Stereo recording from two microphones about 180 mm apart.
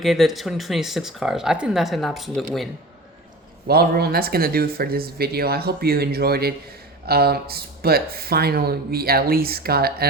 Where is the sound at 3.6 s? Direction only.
60° right (ahead or behind).